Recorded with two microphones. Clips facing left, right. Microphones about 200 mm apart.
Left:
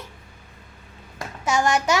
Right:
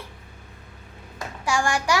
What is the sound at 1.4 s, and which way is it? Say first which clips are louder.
Speech: left 3 dB; 20° left (ahead or behind).